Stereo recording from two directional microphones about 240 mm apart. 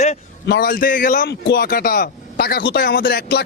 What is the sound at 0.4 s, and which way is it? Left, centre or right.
A man's voice, left.